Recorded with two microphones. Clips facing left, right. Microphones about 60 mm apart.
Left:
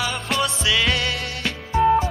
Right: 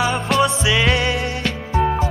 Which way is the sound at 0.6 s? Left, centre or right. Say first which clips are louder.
Right 3 dB; centre.